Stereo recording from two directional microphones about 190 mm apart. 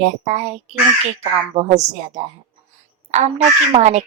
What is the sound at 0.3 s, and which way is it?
A woman's voice, 35° right (ahead or behind).